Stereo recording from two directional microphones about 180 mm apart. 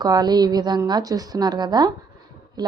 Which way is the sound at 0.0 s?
20° right (ahead or behind).